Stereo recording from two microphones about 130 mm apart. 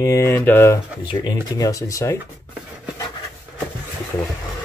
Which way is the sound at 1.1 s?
35° left (ahead or behind).